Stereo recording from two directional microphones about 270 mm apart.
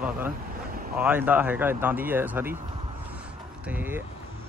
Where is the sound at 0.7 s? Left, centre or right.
Right.